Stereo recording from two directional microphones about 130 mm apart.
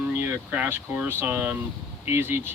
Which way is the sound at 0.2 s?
15° right (ahead or behind).